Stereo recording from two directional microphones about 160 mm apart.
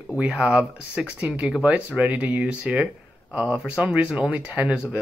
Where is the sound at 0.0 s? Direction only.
5° right (ahead or behind).